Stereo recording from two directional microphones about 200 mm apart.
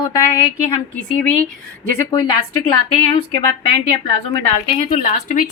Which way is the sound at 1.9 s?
15° left (ahead or behind).